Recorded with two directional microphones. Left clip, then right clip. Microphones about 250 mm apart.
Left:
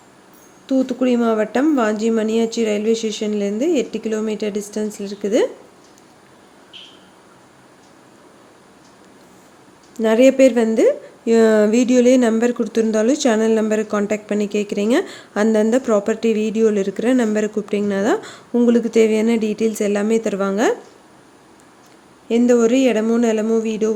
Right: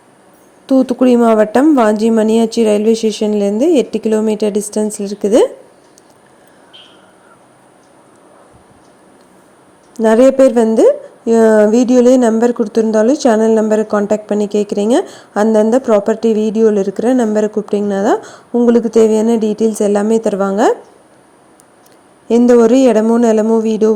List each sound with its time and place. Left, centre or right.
0.7 s speech: right
10.0 s a woman's voice: centre
22.3 s speech: centre